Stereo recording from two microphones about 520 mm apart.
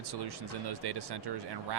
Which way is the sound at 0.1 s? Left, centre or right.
Right.